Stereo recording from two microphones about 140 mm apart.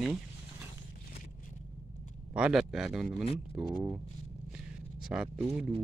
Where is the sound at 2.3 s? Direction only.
5° right (ahead or behind).